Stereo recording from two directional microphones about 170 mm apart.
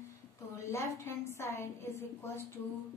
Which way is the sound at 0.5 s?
15° left (ahead or behind).